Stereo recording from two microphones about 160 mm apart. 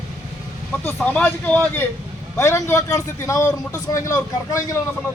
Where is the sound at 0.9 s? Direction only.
10° left (ahead or behind).